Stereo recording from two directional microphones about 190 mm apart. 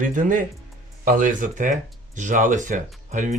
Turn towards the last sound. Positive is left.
turn(degrees=-40)  # may be behind; listen again after turning